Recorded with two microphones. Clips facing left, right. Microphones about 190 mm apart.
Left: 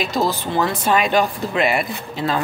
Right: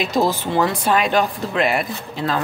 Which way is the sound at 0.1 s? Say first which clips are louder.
Right 3 dB; 15° right (ahead or behind).